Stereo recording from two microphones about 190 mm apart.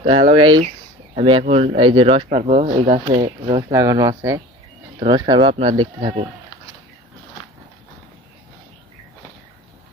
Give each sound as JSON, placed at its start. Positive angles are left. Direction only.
{"t": 0.0, "sound": "speech", "side_deg": -30}